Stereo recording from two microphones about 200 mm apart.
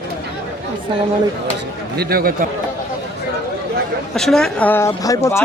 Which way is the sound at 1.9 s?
50° right (ahead or behind).